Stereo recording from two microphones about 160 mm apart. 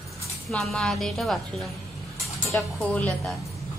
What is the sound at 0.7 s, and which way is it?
Speech, 5° left (ahead or behind).